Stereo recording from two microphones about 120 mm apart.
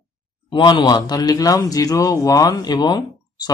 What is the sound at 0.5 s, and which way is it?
A man's voice, 40° left (ahead or behind).